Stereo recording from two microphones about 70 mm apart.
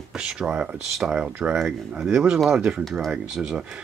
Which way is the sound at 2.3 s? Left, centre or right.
Centre.